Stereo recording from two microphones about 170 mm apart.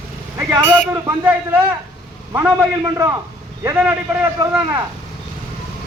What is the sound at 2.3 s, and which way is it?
A man's voice, 15° right (ahead or behind).